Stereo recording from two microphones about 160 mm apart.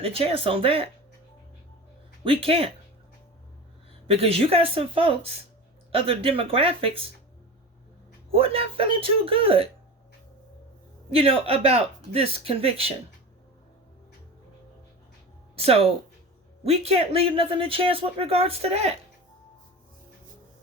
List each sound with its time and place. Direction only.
0.0 s a man's voice: 35° right (ahead or behind)
2.2 s a man's voice: 35° right (ahead or behind)
4.0 s a man's voice: 35° right (ahead or behind)
8.3 s a man's voice: 35° right (ahead or behind)
11.1 s a man's voice: 35° right (ahead or behind)
15.5 s a man's voice: 35° right (ahead or behind)